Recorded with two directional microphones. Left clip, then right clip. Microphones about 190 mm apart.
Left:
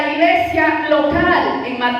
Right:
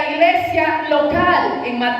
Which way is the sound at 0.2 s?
25° right (ahead or behind).